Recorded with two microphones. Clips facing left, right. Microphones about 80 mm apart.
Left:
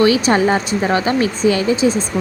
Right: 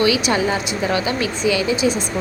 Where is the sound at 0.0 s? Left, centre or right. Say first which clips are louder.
Left 4 dB; left.